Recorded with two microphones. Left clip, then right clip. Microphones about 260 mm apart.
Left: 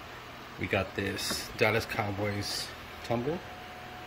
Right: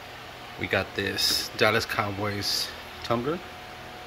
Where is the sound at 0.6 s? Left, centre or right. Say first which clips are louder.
Right 4 dB; centre.